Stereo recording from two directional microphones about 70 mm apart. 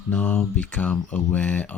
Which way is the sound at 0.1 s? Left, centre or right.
Centre.